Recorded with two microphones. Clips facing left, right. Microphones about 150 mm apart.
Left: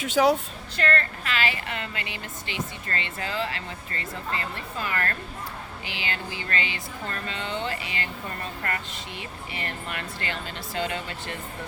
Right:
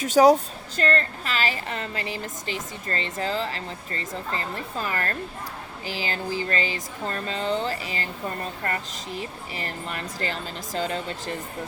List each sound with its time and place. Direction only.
0.0 s a woman's voice: 40° right (ahead or behind)